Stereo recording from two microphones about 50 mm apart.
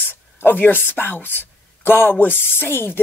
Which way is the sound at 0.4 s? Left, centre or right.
Left.